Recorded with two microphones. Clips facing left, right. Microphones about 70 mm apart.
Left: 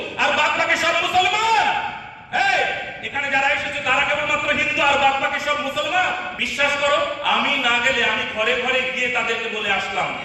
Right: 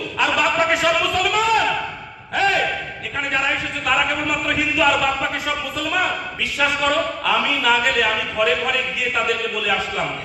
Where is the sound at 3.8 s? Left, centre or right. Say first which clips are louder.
Right 1 dB; left.